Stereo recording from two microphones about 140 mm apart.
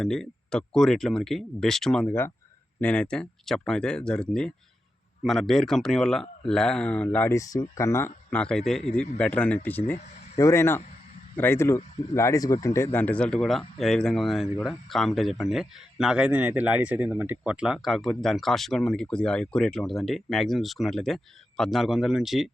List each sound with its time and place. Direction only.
0.0 s speech: 5° left (ahead or behind)